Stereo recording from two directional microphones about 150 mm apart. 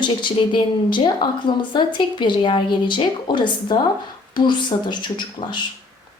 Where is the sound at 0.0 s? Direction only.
30° left (ahead or behind).